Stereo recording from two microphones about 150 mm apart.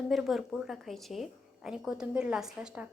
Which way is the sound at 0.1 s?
Centre (ahead or behind).